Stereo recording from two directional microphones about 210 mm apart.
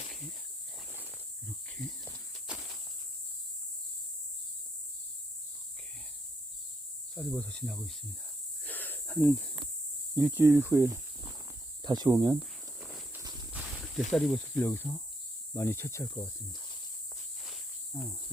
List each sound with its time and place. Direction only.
2.5 s insect: centre (ahead or behind)
7.2 s speech: 5° left (ahead or behind)
8.6 s snake: 10° left (ahead or behind)
10.2 s speech: 5° right (ahead or behind); by 12.4 s 20° right (ahead or behind)
12.4 s cricket: centre (ahead or behind)
13.1 s walk: 10° right (ahead or behind)
14.1 s speech: centre (ahead or behind); by 16.6 s 20° left (ahead or behind)